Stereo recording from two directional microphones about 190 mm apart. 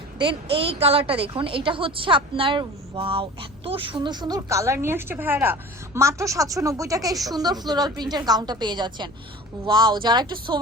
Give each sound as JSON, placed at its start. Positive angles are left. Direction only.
{"t": 0.2, "sound": "a woman's voice", "side_deg": -25}